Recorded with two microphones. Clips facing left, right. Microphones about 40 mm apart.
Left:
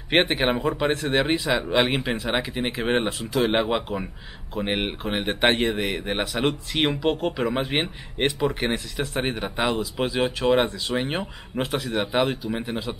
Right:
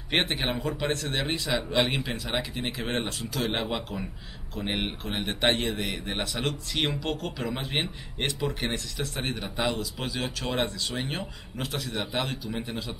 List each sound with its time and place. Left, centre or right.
0.1 s speech: centre